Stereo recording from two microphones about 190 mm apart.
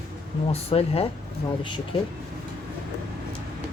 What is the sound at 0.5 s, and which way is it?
Speech, 30° left (ahead or behind).